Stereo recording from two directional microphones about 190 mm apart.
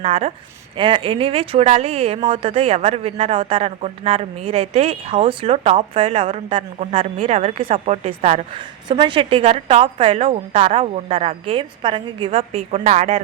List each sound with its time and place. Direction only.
0.0 s speech: 35° right (ahead or behind)